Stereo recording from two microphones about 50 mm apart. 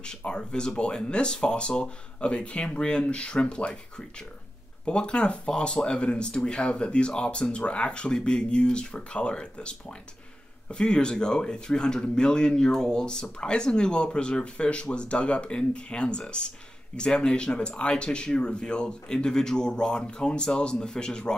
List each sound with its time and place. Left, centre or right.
0.0 s speech: centre
4.8 s speech: centre